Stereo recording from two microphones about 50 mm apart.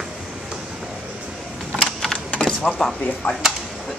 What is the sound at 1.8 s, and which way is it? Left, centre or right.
Typewriter, centre.